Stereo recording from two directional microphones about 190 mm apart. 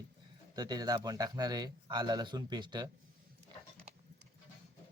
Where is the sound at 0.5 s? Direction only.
20° right (ahead or behind).